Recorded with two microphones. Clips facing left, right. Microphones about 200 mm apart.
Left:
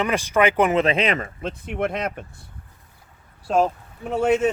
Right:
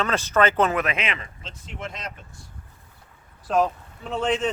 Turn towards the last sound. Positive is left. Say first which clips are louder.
# left 5 dB
turn(degrees=10)  # may be behind; listen again after turning